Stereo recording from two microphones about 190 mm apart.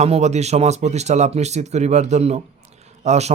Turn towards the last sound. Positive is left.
turn(degrees=-35)  # may be behind; listen again after turning